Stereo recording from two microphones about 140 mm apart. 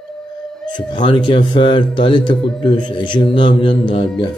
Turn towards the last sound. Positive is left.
turn(degrees=35)  # may be behind; listen again after turning